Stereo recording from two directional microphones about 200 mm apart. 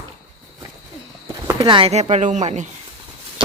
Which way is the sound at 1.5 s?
20° right (ahead or behind).